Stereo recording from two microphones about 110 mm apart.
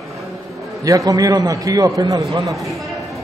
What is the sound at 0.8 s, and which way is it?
A man's voice, 30° right (ahead or behind).